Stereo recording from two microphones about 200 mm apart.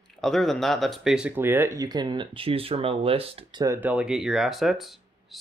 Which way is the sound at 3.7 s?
5° right (ahead or behind).